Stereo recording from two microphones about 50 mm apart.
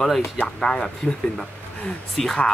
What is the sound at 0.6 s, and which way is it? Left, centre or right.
Speech, centre.